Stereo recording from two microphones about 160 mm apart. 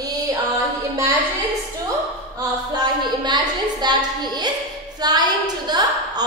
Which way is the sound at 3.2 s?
25° right (ahead or behind).